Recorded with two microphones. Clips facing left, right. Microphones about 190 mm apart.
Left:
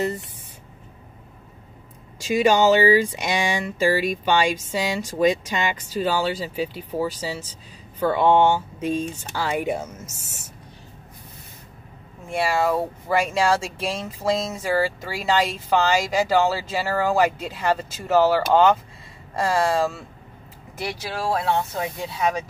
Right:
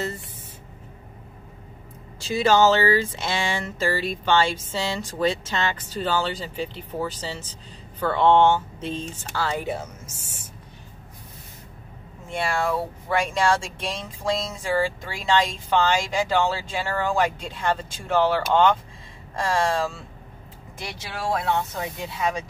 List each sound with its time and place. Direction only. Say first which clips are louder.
2.1 s speech: left 1 dB; 10° left (ahead or behind)
12.3 s speech: left 3 dB; 5° left (ahead or behind)
21.3 s speech: left 1 dB; 30° left (ahead or behind)